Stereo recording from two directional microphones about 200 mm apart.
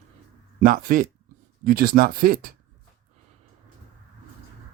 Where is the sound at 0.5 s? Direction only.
45° right (ahead or behind).